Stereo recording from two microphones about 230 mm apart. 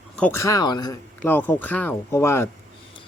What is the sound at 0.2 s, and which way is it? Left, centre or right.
Speech, centre.